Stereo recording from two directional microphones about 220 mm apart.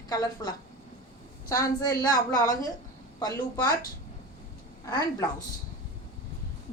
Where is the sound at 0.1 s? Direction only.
15° left (ahead or behind).